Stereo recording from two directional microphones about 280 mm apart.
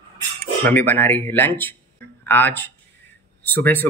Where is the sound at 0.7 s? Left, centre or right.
Centre.